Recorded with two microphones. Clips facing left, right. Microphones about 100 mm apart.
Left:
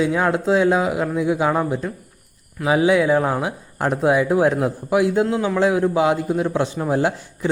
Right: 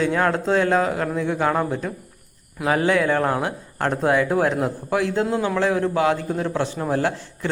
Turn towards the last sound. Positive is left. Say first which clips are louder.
# left 2 dB
turn(degrees=20)  # may be behind; listen again after turning